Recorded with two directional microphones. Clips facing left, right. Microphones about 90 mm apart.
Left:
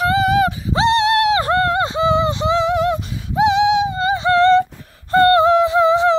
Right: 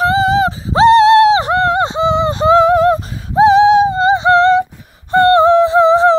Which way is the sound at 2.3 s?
45° right (ahead or behind).